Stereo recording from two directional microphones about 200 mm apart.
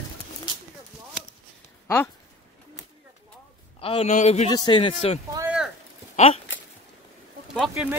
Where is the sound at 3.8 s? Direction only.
30° left (ahead or behind).